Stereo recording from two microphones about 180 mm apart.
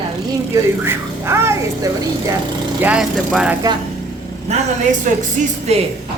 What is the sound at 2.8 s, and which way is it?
Speech, 5° right (ahead or behind).